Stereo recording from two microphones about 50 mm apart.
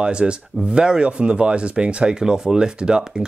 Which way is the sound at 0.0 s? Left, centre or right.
Centre.